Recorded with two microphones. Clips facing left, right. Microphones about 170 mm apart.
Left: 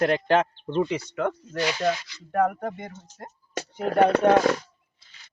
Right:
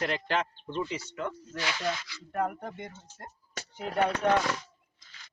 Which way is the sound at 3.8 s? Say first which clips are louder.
Left 8 dB; 60° left (ahead or behind).